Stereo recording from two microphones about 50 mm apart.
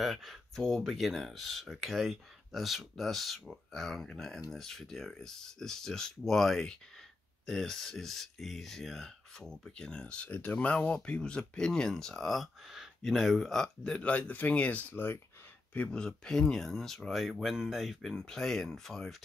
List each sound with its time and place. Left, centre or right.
0.0 s speech: centre
9.5 s speech: centre; by 10.7 s left
10.7 s speech: left
13.9 s speech: left
15.9 s speech: centre